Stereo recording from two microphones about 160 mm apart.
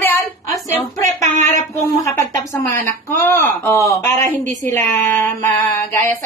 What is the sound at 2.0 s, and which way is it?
Speech, 20° left (ahead or behind).